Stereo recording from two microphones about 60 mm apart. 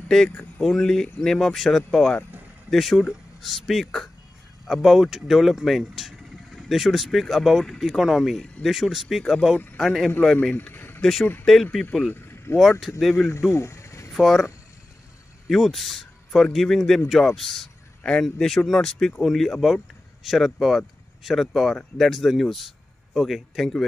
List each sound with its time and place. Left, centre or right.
0.4 s speech: centre
10.5 s vehicle: left
11.0 s speech: centre
12.1 s vehicle: left
13.3 s a sound: left
14.1 s speech: centre
15.4 s speech: centre